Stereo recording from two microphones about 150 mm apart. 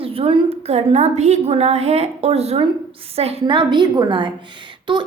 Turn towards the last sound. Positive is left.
turn(degrees=-30)  # may be behind; listen again after turning